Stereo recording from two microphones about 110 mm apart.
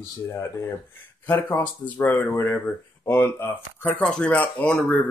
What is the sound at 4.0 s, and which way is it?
Speech, 5° left (ahead or behind).